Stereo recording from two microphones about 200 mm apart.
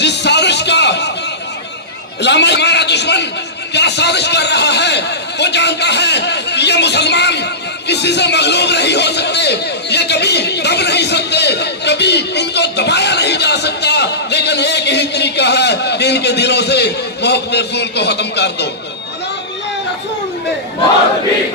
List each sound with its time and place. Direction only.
0.0 s music: 60° left (ahead or behind)
2.2 s a man's voice: 60° left (ahead or behind)
7.9 s a sound: 60° left (ahead or behind)